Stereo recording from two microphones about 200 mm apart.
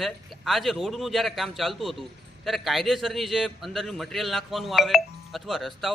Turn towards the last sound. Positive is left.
turn(degrees=0)  # may be behind; listen again after turning